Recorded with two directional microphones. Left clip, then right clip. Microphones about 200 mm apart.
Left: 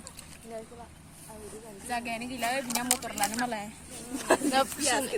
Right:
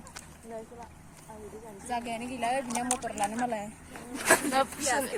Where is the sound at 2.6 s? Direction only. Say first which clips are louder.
Even; 20° left (ahead or behind).